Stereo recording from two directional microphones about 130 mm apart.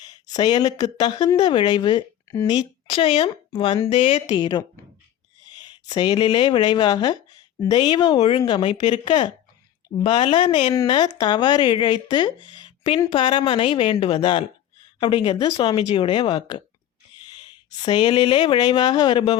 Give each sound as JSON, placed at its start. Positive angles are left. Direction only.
{"t": 0.0, "sound": "speech", "side_deg": 30}
{"t": 17.7, "sound": "speech", "side_deg": 35}